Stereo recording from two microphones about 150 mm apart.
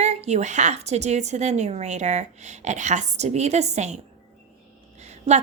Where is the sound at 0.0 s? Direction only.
45° right (ahead or behind).